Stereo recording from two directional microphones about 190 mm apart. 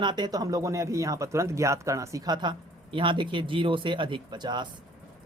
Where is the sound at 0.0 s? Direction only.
25° right (ahead or behind).